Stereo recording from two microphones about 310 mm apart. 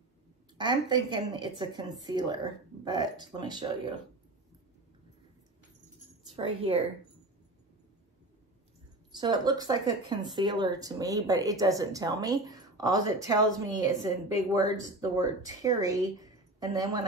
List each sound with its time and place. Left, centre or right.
0.6 s speech: centre
6.3 s speech: centre
9.1 s speech: centre